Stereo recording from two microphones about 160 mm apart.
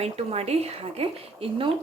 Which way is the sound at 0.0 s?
40° right (ahead or behind).